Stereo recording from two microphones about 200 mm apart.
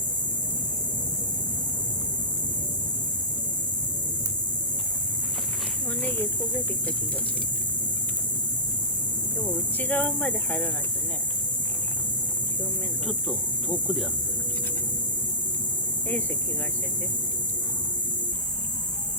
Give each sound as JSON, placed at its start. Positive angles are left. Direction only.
{"t": 6.0, "sound": "speech", "side_deg": 10}
{"t": 9.7, "sound": "speech", "side_deg": 10}
{"t": 13.1, "sound": "speech", "side_deg": 0}